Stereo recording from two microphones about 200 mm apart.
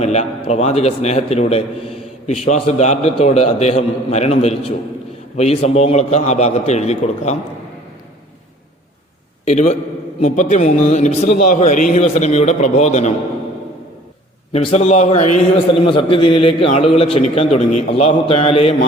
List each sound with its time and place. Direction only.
0.0 s a man's voice: 35° left (ahead or behind)
9.4 s a man's voice: 35° left (ahead or behind)
14.5 s a man's voice: 30° left (ahead or behind)